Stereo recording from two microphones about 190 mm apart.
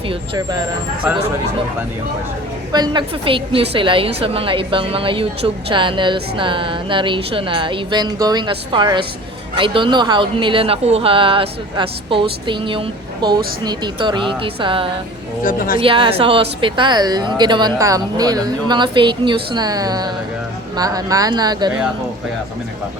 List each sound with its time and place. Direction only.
0.1 s a woman's voice: 20° right (ahead or behind)
2.7 s a woman's voice: 20° right (ahead or behind)
15.4 s a woman's voice: 45° left (ahead or behind)
15.8 s a woman's voice: 30° right (ahead or behind)